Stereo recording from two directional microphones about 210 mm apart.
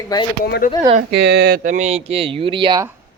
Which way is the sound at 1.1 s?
55° right (ahead or behind).